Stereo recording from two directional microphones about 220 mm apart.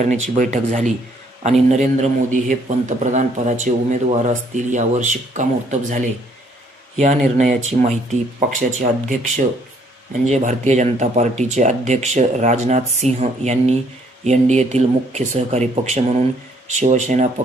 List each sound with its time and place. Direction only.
0.0 s a man's voice: 35° right (ahead or behind)
6.9 s a man's voice: 30° right (ahead or behind)